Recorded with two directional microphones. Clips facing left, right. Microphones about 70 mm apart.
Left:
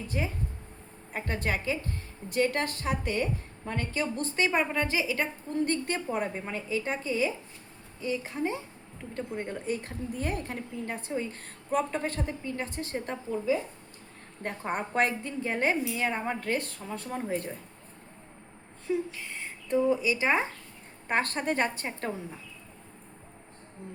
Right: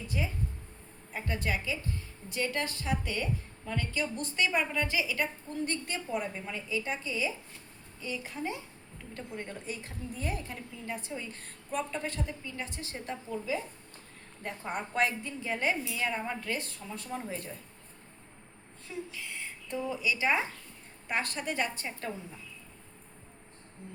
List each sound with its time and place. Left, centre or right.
0.1 s a woman's voice: left
14.4 s a woman's voice: left
19.1 s a woman's voice: left